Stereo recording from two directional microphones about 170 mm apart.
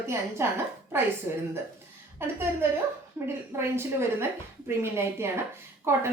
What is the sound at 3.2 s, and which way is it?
A woman's voice, 10° right (ahead or behind).